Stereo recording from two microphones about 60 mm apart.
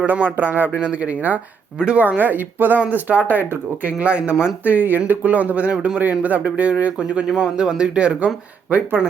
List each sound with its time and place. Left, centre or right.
0.0 s speech: right
3.9 s speech: centre
4.6 s speech: right